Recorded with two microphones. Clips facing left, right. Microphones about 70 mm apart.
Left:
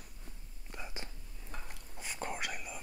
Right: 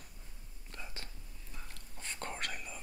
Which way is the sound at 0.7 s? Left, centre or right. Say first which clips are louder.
Left 3 dB; centre.